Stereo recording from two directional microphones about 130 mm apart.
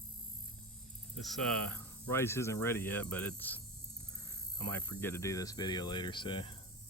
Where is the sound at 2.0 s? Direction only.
20° left (ahead or behind).